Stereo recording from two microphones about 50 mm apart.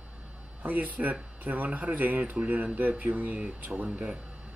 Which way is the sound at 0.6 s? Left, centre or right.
Right.